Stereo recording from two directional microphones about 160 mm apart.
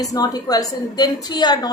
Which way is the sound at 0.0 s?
25° left (ahead or behind).